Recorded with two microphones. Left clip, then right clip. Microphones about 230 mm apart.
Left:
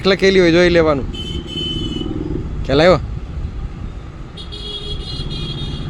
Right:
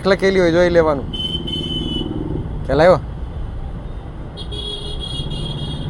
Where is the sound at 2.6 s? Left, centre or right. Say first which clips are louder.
Even; left.